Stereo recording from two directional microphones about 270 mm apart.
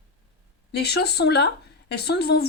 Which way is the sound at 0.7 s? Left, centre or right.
Left.